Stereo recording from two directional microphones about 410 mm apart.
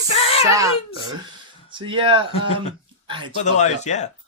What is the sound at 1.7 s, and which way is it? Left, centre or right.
Speech, centre.